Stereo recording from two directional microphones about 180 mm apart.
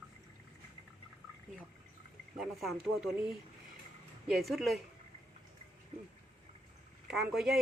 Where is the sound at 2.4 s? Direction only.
Centre (ahead or behind).